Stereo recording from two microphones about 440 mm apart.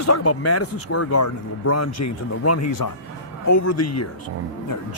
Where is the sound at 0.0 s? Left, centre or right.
Left.